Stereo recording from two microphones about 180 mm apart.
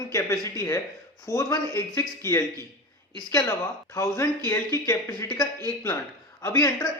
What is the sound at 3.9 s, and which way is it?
A man's voice, 20° left (ahead or behind).